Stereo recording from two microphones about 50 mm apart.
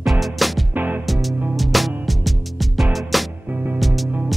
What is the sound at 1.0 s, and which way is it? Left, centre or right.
Music, centre.